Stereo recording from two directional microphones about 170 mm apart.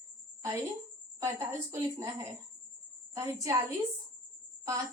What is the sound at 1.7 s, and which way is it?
A woman's voice, 15° right (ahead or behind).